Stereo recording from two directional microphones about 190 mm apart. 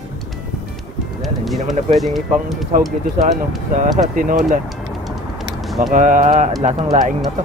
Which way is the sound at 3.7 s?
45° right (ahead or behind).